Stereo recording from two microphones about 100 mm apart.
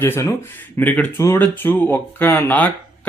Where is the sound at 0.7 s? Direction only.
15° left (ahead or behind).